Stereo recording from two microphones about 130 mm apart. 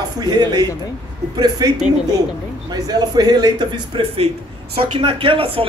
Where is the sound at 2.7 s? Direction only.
30° right (ahead or behind).